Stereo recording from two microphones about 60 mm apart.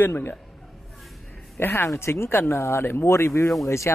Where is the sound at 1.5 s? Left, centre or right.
Left.